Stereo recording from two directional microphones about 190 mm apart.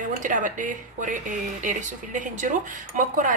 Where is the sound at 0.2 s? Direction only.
45° right (ahead or behind).